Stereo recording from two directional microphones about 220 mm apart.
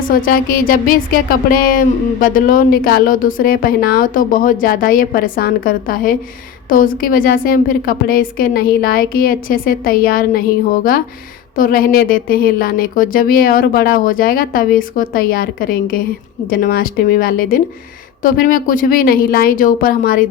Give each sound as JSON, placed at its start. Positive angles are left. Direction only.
{"t": 0.1, "sound": "speech", "side_deg": 40}